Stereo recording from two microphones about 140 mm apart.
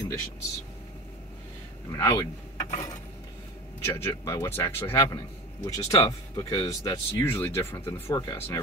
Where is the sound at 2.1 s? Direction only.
25° left (ahead or behind).